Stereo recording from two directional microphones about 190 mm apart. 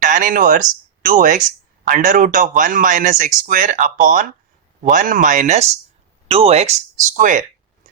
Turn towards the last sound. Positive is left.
turn(degrees=-45)  # may be behind; listen again after turning